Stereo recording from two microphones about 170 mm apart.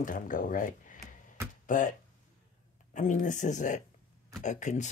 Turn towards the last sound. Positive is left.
turn(degrees=45)  # may be behind; listen again after turning